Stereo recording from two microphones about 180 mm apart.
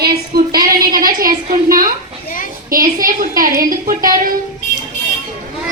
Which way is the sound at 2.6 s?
50° right (ahead or behind).